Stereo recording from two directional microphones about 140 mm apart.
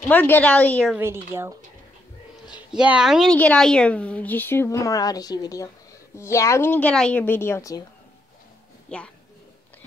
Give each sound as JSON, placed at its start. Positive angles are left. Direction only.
{"t": 0.1, "sound": "a woman's voice", "side_deg": 10}
{"t": 0.9, "sound": "speech", "side_deg": -15}
{"t": 2.7, "sound": "a woman's voice", "side_deg": -5}
{"t": 8.8, "sound": "speech", "side_deg": 10}